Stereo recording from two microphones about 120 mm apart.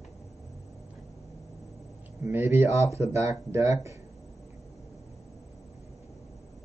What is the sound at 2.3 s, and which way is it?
Speech, 20° right (ahead or behind).